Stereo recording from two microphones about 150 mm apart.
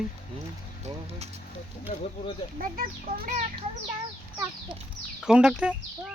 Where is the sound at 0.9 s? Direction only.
40° right (ahead or behind).